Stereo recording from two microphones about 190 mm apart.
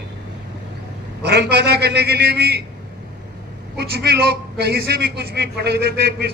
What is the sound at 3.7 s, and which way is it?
A man's voice, 60° right (ahead or behind).